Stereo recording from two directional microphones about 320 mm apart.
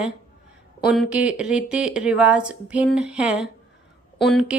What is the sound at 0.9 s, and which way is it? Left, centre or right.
A woman's voice, centre.